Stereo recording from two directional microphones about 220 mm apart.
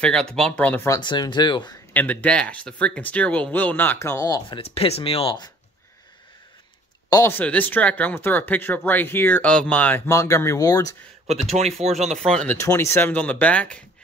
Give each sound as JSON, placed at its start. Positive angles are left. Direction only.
{"t": 0.0, "sound": "speech", "side_deg": 5}
{"t": 2.0, "sound": "speech", "side_deg": 5}
{"t": 7.1, "sound": "speech", "side_deg": 10}
{"t": 11.5, "sound": "speech", "side_deg": -30}
{"t": 12.3, "sound": "speech", "side_deg": 5}